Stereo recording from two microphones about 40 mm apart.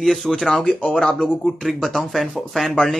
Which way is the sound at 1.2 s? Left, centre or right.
Centre.